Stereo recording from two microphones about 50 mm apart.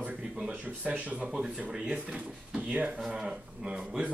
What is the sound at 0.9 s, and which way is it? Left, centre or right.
Speech, right.